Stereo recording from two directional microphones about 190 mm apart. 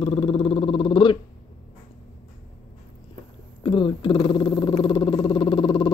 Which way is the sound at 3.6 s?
25° left (ahead or behind).